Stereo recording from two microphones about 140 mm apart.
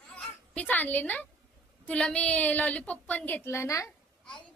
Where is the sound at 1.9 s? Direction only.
5° left (ahead or behind).